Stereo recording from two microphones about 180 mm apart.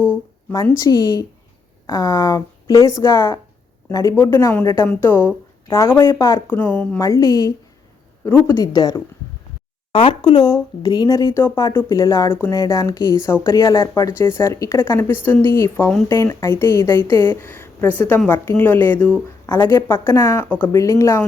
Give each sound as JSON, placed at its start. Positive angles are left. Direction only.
{"t": 0.1, "sound": "a sound", "side_deg": 15}
{"t": 0.9, "sound": "speech", "side_deg": 20}
{"t": 7.0, "sound": "speech", "side_deg": 20}
{"t": 8.2, "sound": "speech", "side_deg": 10}
{"t": 8.4, "sound": "speech", "side_deg": 20}